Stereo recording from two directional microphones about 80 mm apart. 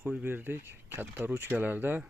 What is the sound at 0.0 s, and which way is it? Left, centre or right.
Speech, right.